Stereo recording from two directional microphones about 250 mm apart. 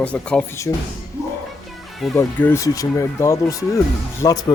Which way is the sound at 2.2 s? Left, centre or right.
Centre.